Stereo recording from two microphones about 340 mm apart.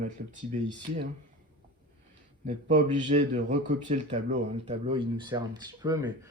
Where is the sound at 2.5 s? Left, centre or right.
Right.